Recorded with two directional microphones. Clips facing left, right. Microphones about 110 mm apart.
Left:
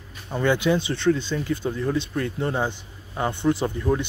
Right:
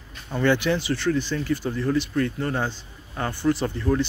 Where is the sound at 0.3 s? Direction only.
15° left (ahead or behind).